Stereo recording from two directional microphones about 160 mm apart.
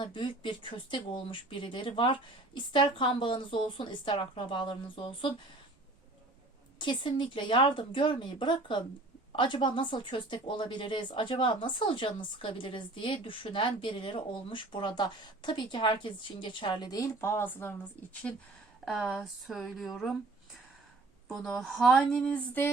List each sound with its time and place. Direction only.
0.0 s speech: 30° left (ahead or behind)
6.7 s a woman's voice: 30° left (ahead or behind); by 20.1 s centre (ahead or behind)
21.2 s a woman's voice: 5° left (ahead or behind)